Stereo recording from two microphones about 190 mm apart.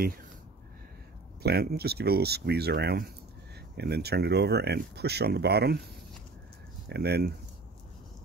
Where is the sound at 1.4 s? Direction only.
55° right (ahead or behind).